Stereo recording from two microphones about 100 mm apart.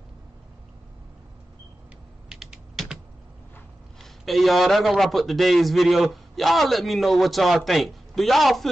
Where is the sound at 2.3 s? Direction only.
5° right (ahead or behind).